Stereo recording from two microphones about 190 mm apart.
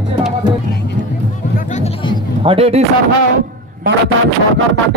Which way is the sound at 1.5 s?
40° left (ahead or behind).